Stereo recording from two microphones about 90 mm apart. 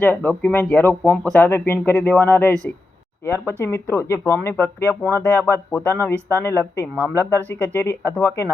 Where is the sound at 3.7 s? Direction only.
35° left (ahead or behind).